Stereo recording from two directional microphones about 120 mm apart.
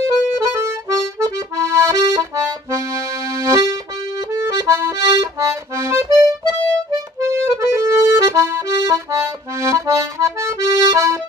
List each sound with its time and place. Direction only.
0.0 s accordion: 25° right (ahead or behind)
3.3 s accordion: 25° right (ahead or behind)